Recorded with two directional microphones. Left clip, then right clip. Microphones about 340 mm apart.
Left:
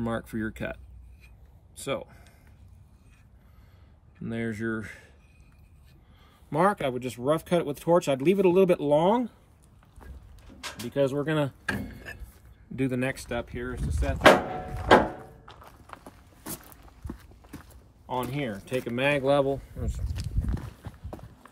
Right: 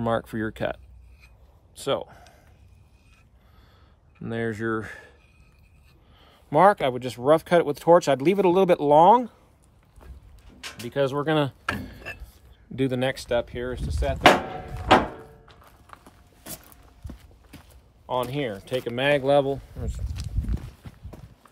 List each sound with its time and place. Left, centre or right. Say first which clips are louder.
0.0 s speech: right 6 dB; right
1.8 s speech: right 6 dB; right
4.2 s speech: right 4 dB; right
6.5 s speech: right 7 dB; right
10.9 s speech: right 3 dB; centre
11.6 s a sound: right 2 dB; centre
12.7 s speech: right 4 dB; right
13.7 s speech: right 4 dB; centre
15.4 s music: left 3 dB; centre
17.0 s clip-clop: left 4 dB; centre
18.0 s speech: right 4 dB; right
20.1 s walk: even; centre
20.5 s clip-clop: left 1 dB; centre